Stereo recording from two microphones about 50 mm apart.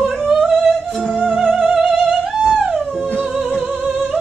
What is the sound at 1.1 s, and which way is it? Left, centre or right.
Music, centre.